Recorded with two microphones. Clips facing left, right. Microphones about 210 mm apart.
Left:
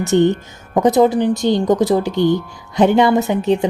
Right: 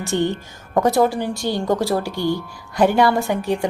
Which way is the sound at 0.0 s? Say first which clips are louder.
Left 7 dB; 20° left (ahead or behind).